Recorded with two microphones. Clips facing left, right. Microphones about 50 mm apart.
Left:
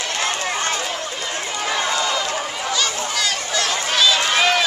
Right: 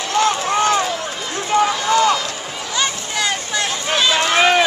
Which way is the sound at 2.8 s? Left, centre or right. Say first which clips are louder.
Right 4 dB; right.